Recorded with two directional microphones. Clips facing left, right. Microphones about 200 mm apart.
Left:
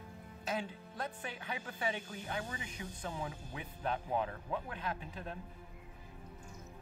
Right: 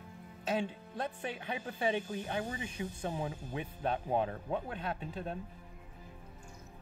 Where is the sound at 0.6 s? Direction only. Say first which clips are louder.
Right 5 dB; 30° right (ahead or behind).